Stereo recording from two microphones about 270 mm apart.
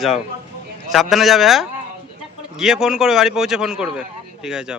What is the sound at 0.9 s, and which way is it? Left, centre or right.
Speech, centre.